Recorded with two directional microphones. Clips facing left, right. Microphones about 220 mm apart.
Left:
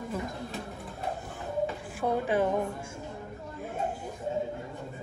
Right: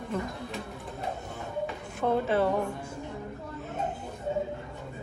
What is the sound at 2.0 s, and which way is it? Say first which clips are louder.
Speech: right 2 dB; 15° left (ahead or behind).